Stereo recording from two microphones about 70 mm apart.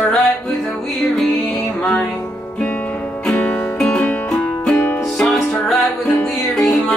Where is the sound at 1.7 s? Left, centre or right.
Centre.